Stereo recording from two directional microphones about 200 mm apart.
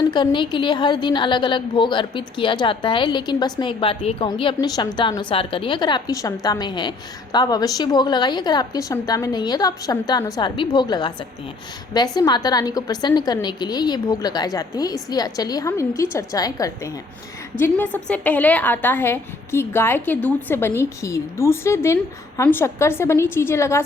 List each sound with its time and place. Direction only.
0.0 s a woman's voice: 20° left (ahead or behind)